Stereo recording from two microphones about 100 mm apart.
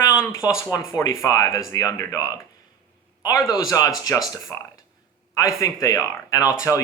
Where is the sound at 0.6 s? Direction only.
30° left (ahead or behind).